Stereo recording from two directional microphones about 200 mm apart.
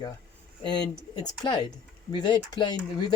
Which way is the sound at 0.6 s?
20° left (ahead or behind).